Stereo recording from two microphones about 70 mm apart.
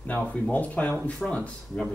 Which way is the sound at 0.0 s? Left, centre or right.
Left.